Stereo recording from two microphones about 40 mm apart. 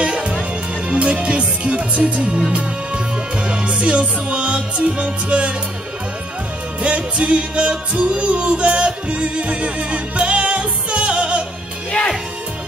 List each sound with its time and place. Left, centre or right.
0.0 s music: right
3.4 s music: right
6.8 s music: right